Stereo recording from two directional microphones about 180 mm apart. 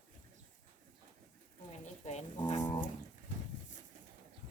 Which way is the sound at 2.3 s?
25° left (ahead or behind).